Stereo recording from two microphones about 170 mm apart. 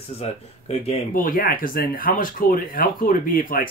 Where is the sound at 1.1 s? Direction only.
55° left (ahead or behind).